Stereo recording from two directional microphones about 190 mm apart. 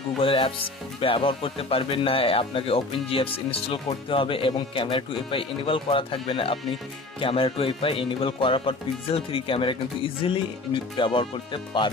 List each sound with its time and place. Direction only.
0.2 s speech: 30° left (ahead or behind)